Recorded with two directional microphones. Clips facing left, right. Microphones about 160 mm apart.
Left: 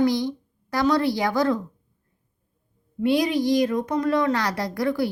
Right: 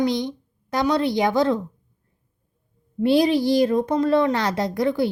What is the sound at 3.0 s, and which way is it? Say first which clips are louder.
A woman's voice: right 3 dB; 30° right (ahead or behind).